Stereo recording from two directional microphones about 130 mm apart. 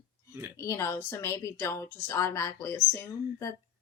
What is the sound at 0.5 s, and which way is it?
A woman's voice, 25° left (ahead or behind).